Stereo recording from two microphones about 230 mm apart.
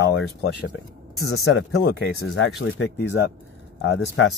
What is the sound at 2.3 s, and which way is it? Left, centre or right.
Speech, left.